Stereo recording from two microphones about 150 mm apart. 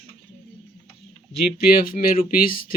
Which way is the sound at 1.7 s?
75° left (ahead or behind).